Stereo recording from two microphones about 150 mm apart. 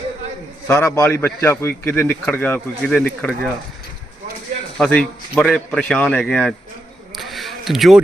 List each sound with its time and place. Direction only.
0.7 s a man's voice: 20° left (ahead or behind)
4.8 s a man's voice: 5° left (ahead or behind)
7.2 s a sound: centre (ahead or behind)